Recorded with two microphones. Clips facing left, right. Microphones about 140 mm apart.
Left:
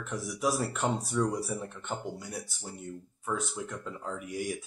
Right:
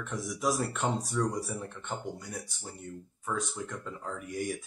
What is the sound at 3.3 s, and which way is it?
Speech, 5° left (ahead or behind).